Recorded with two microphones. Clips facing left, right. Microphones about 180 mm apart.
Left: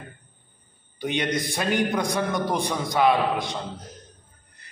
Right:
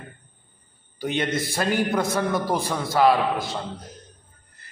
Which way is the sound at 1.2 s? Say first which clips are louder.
Right 2 dB; centre (ahead or behind).